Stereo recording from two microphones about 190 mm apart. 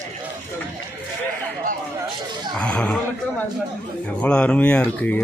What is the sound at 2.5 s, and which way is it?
Speech, 5° left (ahead or behind).